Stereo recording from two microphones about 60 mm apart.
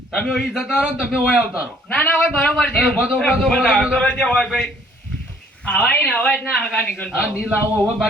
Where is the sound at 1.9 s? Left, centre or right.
Left.